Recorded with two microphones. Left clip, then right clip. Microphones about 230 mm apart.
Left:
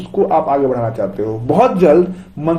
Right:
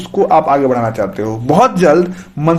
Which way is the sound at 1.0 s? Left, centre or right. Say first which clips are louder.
Right 2 dB; right.